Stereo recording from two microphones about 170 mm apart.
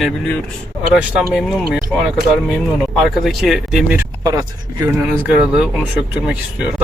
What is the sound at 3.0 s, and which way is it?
Speech, centre (ahead or behind).